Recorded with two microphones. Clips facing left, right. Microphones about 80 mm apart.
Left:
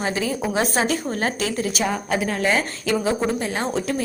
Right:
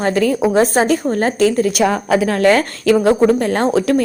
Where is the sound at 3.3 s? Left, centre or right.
Right.